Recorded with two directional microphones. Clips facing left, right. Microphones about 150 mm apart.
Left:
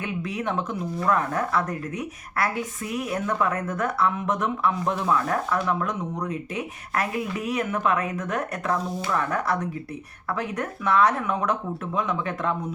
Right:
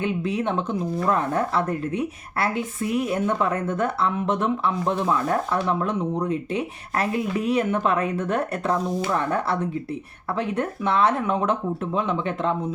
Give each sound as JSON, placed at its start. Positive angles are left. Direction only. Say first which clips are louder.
{"t": 0.0, "sound": "a woman's voice", "louder": "right 5 dB", "side_deg": -25}